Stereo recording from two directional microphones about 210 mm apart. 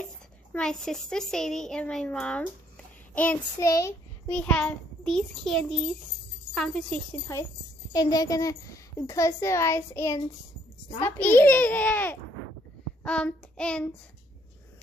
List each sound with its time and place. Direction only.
0.0 s a child's voice: 5° left (ahead or behind)
13.0 s child singing: 5° left (ahead or behind)